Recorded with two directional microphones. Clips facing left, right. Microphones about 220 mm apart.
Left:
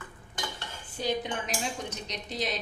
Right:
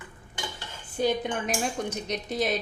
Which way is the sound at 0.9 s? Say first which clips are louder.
Right 5 dB; 50° right (ahead or behind).